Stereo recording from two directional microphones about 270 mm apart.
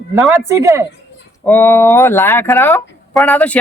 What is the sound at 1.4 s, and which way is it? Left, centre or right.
Speech, centre.